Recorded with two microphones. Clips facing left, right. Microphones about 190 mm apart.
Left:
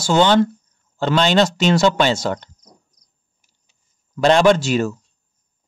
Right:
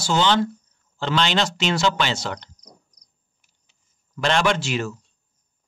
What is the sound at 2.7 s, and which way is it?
Cricket, 25° left (ahead or behind).